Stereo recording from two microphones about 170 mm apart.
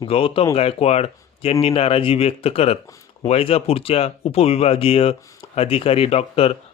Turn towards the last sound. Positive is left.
turn(degrees=35)  # may be behind; listen again after turning